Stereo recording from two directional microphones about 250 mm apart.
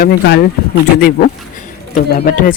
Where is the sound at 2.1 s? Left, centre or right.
Left.